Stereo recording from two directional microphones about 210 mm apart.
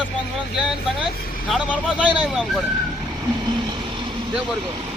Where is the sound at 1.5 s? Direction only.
5° right (ahead or behind).